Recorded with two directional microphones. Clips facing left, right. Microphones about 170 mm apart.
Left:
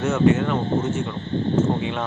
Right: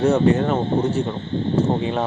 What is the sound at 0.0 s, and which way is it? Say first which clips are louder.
Speech: right 2 dB; 35° right (ahead or behind).